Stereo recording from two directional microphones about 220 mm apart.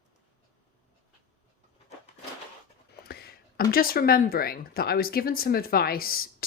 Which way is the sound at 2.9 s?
45° left (ahead or behind).